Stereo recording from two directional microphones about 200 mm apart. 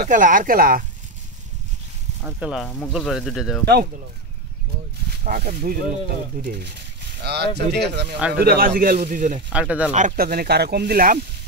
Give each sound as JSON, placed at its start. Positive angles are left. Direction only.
{"t": 0.0, "sound": "speech", "side_deg": -40}
{"t": 2.2, "sound": "speech", "side_deg": -5}
{"t": 5.2, "sound": "speech", "side_deg": -45}
{"t": 8.2, "sound": "speech", "side_deg": -5}
{"t": 8.5, "sound": "speech", "side_deg": -45}
{"t": 9.5, "sound": "speech", "side_deg": -5}
{"t": 9.9, "sound": "speech", "side_deg": -45}